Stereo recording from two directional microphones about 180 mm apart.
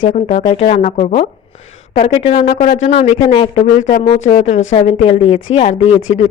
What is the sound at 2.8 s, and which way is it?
Speech, 40° left (ahead or behind).